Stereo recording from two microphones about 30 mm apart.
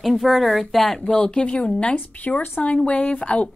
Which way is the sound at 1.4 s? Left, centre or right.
Left.